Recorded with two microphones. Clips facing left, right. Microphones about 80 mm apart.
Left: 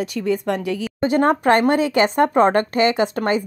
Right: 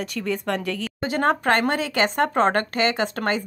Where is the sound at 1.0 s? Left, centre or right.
Left.